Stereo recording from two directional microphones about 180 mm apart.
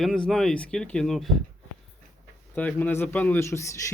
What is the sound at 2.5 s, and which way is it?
Speech, 10° left (ahead or behind).